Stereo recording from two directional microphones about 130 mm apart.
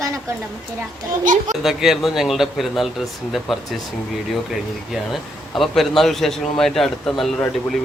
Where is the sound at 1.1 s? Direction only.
90° right.